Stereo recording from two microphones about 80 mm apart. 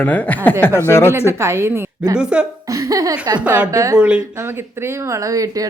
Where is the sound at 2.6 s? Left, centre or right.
Right.